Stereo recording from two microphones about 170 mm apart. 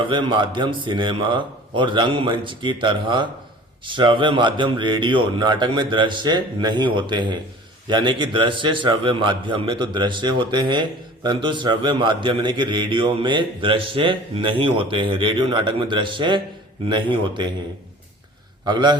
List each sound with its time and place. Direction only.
0.1 s a man's voice: 30° right (ahead or behind)
18.6 s a man's voice: 25° right (ahead or behind)